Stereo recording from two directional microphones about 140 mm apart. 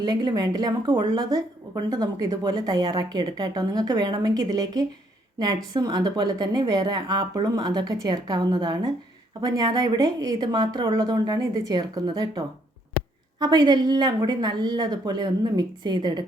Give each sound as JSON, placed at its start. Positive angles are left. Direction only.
{"t": 0.0, "sound": "a woman's voice", "side_deg": -30}
{"t": 13.4, "sound": "a woman's voice", "side_deg": -30}